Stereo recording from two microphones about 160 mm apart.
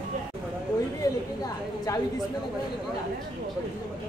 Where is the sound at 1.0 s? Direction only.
20° left (ahead or behind).